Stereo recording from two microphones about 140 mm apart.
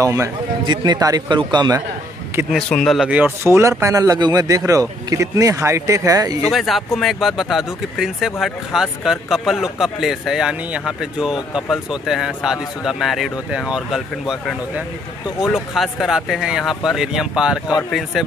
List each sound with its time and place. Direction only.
0.0 s speech: 20° right (ahead or behind)
2.5 s speech: 5° left (ahead or behind)
3.1 s speech: 10° right (ahead or behind)
6.5 s speech: centre (ahead or behind)